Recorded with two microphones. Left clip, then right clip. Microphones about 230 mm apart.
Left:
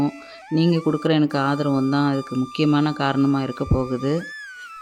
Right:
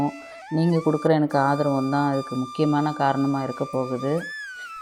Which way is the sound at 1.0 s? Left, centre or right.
Left.